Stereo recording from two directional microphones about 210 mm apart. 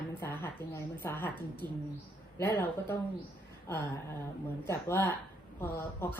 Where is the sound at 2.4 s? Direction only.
10° left (ahead or behind).